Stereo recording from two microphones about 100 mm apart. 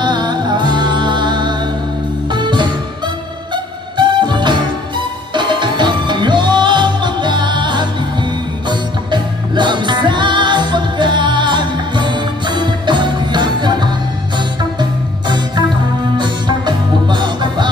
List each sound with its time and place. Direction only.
0.0 s music: 45° right (ahead or behind)